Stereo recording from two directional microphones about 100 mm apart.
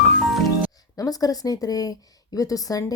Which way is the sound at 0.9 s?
40° left (ahead or behind).